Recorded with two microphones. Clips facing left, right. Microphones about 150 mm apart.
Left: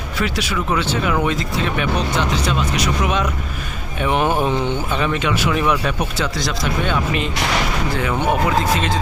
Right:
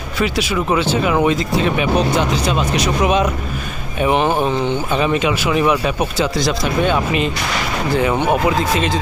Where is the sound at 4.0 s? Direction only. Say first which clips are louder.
Right 2 dB; 5° right (ahead or behind).